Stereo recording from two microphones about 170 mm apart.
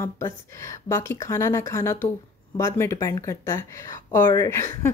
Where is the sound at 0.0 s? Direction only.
15° left (ahead or behind).